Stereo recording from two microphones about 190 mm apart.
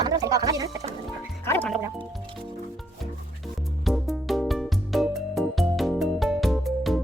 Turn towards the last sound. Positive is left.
turn(degrees=0)  # may be behind; listen again after turning